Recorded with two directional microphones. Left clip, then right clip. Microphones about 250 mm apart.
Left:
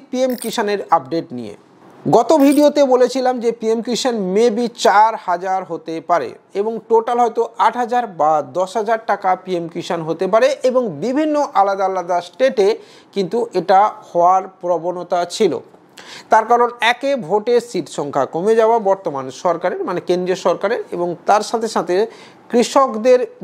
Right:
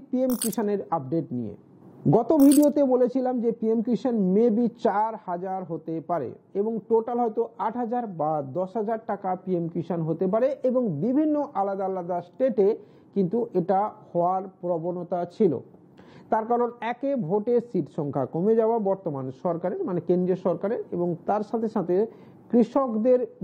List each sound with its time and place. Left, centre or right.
0.1 s speech: centre
6.7 s speech: left
7.1 s speech: centre; by 15.0 s left
15.0 s speech: centre